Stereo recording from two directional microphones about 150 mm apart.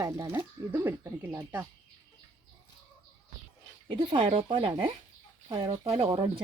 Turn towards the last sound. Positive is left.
turn(degrees=-35)  # may be behind; listen again after turning